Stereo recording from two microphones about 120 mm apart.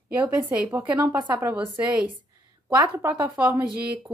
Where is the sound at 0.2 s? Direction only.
10° right (ahead or behind).